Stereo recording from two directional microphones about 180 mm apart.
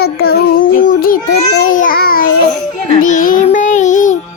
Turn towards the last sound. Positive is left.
turn(degrees=45)  # may be behind; listen again after turning